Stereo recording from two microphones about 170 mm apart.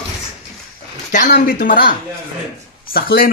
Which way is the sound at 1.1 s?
55° left (ahead or behind).